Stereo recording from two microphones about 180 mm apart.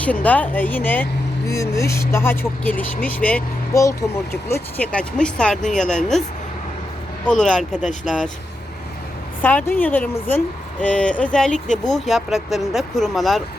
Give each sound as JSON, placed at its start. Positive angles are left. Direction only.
{"t": 0.0, "sound": "speech", "side_deg": 10}
{"t": 7.3, "sound": "speech", "side_deg": 5}
{"t": 7.8, "sound": "speech", "side_deg": 45}
{"t": 9.4, "sound": "speech", "side_deg": 10}